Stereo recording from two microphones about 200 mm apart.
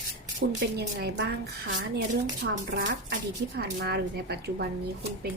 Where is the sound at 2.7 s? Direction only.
55° right (ahead or behind).